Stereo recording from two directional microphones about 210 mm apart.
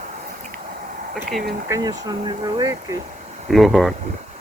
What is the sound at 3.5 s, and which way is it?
Speech, centre (ahead or behind).